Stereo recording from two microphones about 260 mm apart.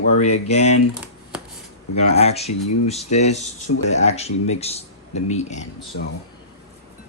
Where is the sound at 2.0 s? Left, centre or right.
Left.